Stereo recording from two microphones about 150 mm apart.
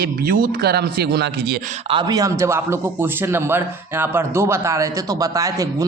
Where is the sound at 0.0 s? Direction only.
80° right.